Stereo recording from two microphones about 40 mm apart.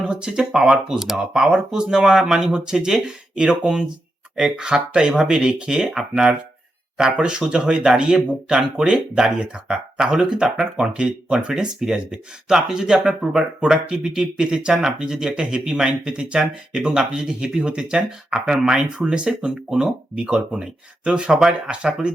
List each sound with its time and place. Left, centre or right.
0.1 s speech: right
14.7 s speech: centre
21.7 s speech: right